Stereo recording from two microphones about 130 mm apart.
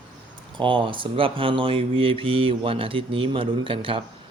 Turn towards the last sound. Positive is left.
turn(degrees=-45)  # may be behind; listen again after turning